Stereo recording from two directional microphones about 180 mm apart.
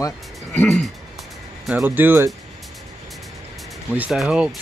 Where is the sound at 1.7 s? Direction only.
5° right (ahead or behind).